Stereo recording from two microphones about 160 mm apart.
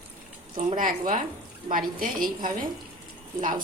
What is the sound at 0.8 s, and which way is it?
Speech, 55° right (ahead or behind).